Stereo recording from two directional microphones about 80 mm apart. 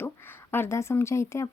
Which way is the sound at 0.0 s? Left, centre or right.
Left.